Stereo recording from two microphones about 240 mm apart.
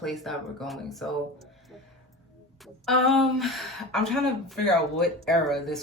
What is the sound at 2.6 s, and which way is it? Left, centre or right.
Speech, centre.